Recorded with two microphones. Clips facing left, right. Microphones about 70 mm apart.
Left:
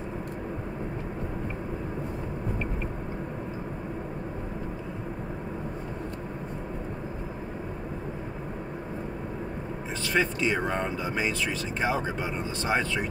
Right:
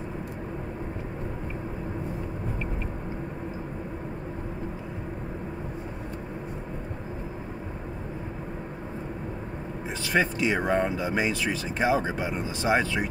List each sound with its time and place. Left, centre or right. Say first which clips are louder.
10.0 s speech: right 1 dB; centre